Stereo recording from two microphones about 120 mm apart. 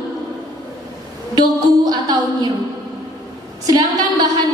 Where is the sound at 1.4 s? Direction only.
35° right (ahead or behind).